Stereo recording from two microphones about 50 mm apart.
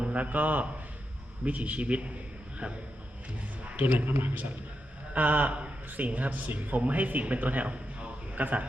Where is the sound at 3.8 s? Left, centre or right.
Right.